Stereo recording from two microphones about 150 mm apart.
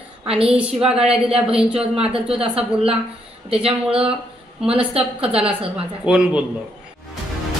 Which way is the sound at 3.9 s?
5° right (ahead or behind).